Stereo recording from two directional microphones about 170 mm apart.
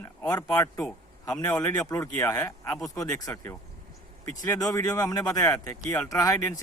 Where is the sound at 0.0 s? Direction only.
15° left (ahead or behind).